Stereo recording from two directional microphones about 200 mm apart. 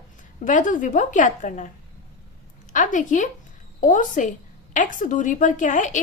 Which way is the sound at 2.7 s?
40° left (ahead or behind).